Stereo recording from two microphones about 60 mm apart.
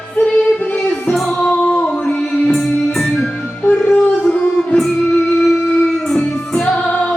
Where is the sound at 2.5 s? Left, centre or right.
Centre.